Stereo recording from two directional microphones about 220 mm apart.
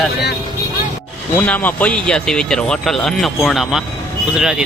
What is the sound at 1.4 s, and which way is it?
Speech, 5° left (ahead or behind).